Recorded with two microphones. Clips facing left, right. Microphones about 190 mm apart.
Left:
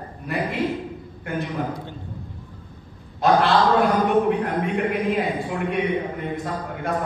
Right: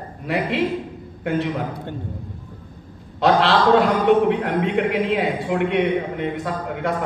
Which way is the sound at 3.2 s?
70° right (ahead or behind).